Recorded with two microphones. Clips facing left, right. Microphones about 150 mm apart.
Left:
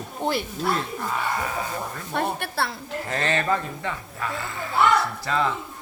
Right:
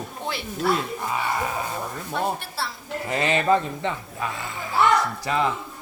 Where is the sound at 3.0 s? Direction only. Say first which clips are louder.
Right 3 dB; 15° right (ahead or behind).